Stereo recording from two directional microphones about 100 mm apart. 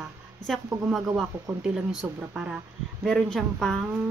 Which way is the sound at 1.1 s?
Centre (ahead or behind).